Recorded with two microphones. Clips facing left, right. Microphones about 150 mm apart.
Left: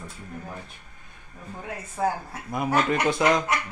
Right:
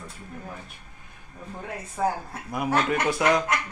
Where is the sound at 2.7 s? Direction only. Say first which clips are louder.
Left 1 dB; 10° left (ahead or behind).